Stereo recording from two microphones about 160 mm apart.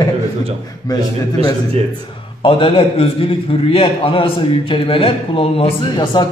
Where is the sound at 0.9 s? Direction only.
25° left (ahead or behind).